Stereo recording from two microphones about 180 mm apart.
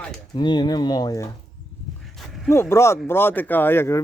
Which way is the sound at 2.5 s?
15° left (ahead or behind).